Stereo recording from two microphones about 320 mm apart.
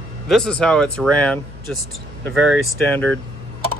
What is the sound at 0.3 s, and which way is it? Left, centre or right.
Speech, centre.